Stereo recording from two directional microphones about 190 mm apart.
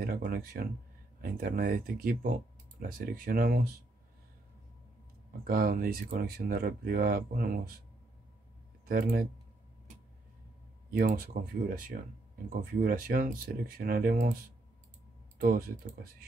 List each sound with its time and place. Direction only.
0.0 s speech: 50° right (ahead or behind)
5.5 s speech: 50° right (ahead or behind)
8.8 s speech: 50° right (ahead or behind)
10.9 s speech: 50° right (ahead or behind)
15.4 s speech: 50° right (ahead or behind)